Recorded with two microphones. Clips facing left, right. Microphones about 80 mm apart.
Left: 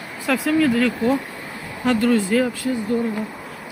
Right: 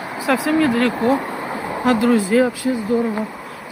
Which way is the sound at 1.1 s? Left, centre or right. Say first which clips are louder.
Right 4 dB; right.